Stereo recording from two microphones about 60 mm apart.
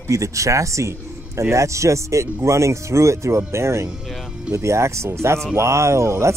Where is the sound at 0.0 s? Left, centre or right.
Right.